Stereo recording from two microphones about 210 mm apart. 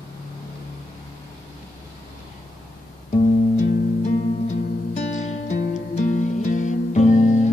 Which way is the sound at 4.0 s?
35° left (ahead or behind).